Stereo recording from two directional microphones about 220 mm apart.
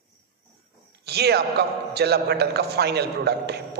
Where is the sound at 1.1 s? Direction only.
45° right (ahead or behind).